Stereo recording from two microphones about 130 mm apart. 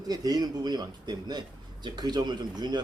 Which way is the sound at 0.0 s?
30° right (ahead or behind).